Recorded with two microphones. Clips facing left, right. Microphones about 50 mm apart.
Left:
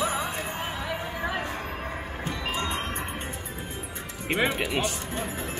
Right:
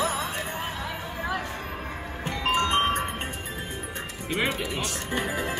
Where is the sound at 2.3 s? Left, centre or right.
Right.